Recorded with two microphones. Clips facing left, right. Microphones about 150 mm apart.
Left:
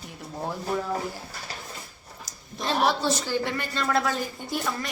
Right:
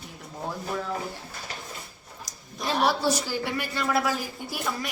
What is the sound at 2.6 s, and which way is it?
A woman's voice, 5° right (ahead or behind).